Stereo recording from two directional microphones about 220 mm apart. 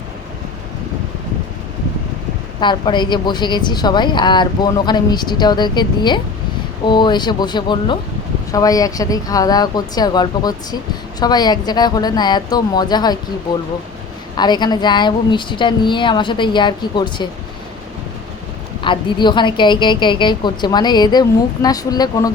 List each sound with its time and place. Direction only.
2.6 s a woman's voice: 20° left (ahead or behind)
14.3 s a woman's voice: 20° left (ahead or behind)
18.8 s a woman's voice: 20° left (ahead or behind)